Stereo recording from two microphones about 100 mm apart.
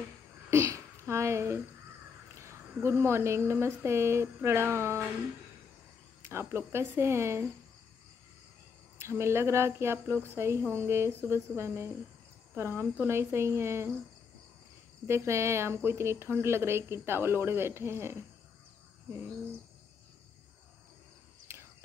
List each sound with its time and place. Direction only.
0.5 s a sound: 30° right (ahead or behind)
2.3 s speech: 30° right (ahead or behind)
6.2 s speech: 25° right (ahead or behind)
8.9 s speech: 25° right (ahead or behind)
15.0 s speech: 25° right (ahead or behind)
21.5 s cricket: 25° right (ahead or behind)